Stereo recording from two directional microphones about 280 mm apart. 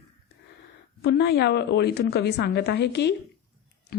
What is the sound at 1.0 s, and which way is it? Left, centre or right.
A woman's voice, left.